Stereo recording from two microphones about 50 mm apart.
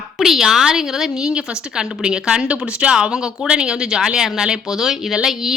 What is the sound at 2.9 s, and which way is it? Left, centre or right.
A woman's voice, centre.